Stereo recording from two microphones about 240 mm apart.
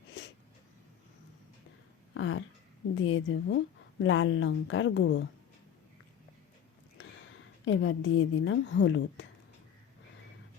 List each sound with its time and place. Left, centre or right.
2.1 s a sound: left
2.9 s a woman's voice: left
7.6 s a woman's voice: left